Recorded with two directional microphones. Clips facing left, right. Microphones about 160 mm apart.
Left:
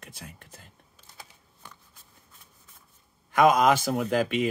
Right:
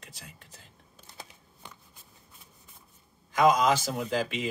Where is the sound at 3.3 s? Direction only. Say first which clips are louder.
Left 3 dB; 55° left (ahead or behind).